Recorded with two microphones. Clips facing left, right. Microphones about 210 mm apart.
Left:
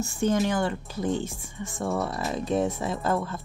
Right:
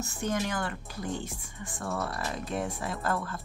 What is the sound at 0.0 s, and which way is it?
Speech, 25° left (ahead or behind).